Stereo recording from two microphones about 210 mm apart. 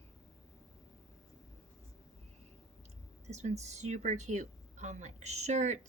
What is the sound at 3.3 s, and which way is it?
Speech, 30° right (ahead or behind).